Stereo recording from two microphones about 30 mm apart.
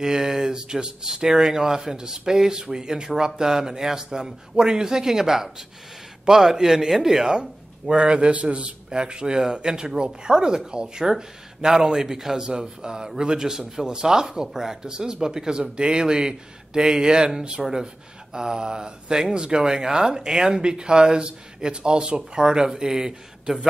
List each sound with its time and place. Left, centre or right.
0.0 s speech: centre
7.3 s speech: right; by 12.4 s centre
12.4 s speech: right
15.6 s speech: right
17.6 s speech: centre
18.3 s speech: right